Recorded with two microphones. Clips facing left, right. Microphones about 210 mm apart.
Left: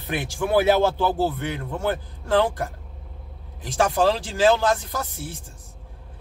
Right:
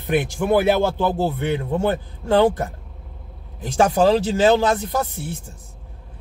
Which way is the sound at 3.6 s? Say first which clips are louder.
Right 4 dB; 20° right (ahead or behind).